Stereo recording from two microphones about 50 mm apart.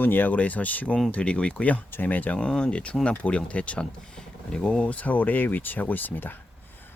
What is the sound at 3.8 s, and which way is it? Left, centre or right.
Speech, centre.